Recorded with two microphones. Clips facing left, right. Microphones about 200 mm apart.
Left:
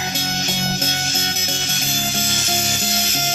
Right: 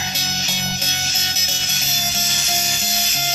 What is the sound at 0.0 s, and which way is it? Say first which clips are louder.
Music: left 4 dB; 50° left (ahead or behind).